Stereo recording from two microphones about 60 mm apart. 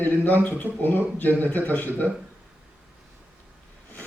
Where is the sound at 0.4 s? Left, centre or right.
Left.